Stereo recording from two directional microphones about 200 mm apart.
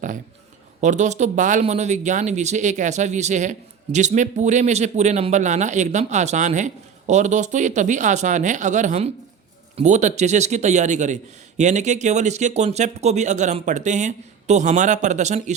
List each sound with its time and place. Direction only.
0.8 s speech: 35° right (ahead or behind)